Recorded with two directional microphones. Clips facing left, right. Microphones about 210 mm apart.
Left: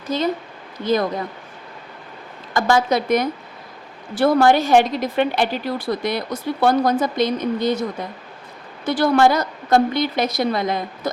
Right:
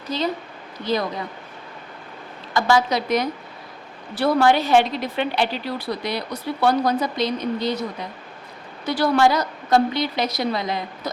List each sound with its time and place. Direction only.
0.1 s a woman's voice: 50° left (ahead or behind)
2.5 s a woman's voice: 50° left (ahead or behind)